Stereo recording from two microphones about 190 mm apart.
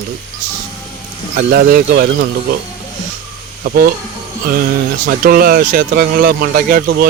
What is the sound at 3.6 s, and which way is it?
Speech, 50° right (ahead or behind).